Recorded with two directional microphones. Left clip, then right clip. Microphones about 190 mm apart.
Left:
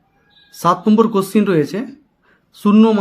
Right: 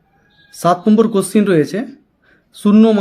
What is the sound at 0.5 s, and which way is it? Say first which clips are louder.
Speech: right 1 dB; centre (ahead or behind).